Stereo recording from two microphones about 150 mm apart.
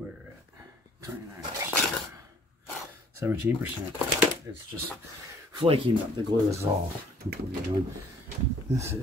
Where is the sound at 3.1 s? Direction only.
20° right (ahead or behind).